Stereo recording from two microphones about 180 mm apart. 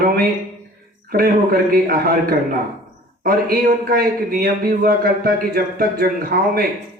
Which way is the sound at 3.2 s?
55° right (ahead or behind).